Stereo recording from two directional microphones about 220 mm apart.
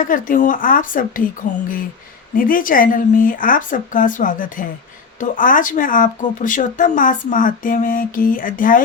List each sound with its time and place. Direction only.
0.0 s speech: 35° left (ahead or behind)